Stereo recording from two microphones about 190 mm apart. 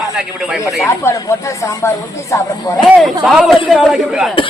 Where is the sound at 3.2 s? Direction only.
Centre (ahead or behind).